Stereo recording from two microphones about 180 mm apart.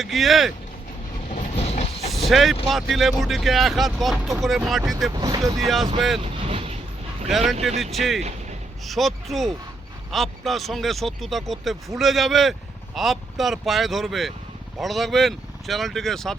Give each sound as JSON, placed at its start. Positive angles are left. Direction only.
{"t": 0.0, "sound": "speech", "side_deg": 0}
{"t": 1.3, "sound": "train", "side_deg": 35}
{"t": 2.0, "sound": "vehicle", "side_deg": 0}
{"t": 2.6, "sound": "speech", "side_deg": 0}
{"t": 5.1, "sound": "speech", "side_deg": -20}
{"t": 5.5, "sound": "speech", "side_deg": 0}
{"t": 6.1, "sound": "vehicle", "side_deg": -30}
{"t": 7.8, "sound": "speech", "side_deg": 0}